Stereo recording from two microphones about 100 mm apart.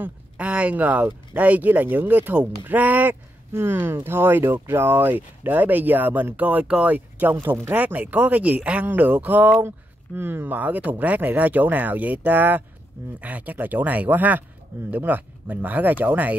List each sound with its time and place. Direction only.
0.0 s speech: 15° right (ahead or behind)